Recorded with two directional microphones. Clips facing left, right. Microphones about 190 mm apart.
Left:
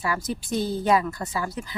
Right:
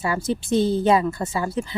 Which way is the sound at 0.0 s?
25° right (ahead or behind).